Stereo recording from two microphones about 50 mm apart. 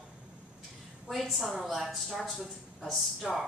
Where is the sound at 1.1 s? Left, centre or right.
Centre.